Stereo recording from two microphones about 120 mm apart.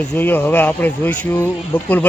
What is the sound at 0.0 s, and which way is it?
Speech, 15° left (ahead or behind).